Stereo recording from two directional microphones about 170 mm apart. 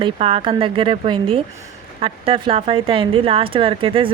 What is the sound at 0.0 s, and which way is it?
A woman's voice, 35° right (ahead or behind).